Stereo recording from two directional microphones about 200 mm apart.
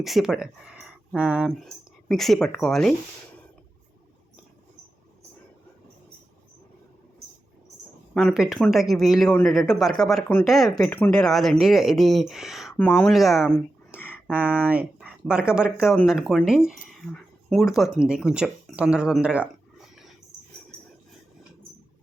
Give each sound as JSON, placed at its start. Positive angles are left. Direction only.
{"t": 0.0, "sound": "speech", "side_deg": 0}
{"t": 8.1, "sound": "speech", "side_deg": 0}
{"t": 13.9, "sound": "a sound", "side_deg": 10}
{"t": 14.3, "sound": "speech", "side_deg": -5}